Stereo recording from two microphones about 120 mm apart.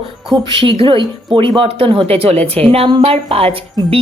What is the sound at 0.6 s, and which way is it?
Speech, 45° right (ahead or behind).